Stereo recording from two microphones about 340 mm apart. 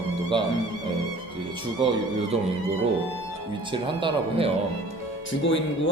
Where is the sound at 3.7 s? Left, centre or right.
Centre.